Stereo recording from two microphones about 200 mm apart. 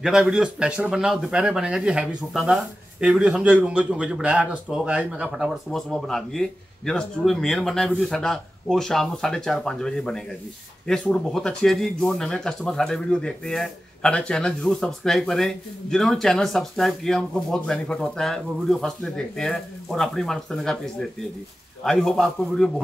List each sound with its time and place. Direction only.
0.0 s speech: centre (ahead or behind)